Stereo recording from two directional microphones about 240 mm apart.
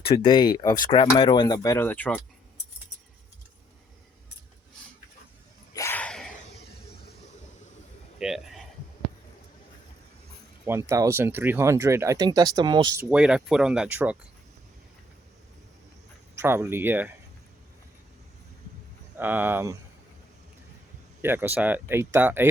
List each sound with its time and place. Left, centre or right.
0.0 s speech: left; by 2.2 s centre
5.7 s a sound: centre
8.2 s a sound: centre
10.7 s speech: centre
16.3 s speech: centre
19.1 s speech: centre
21.2 s speech: centre